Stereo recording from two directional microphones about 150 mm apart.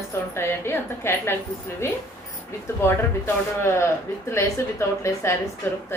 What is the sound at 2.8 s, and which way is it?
A woman's voice, 15° left (ahead or behind).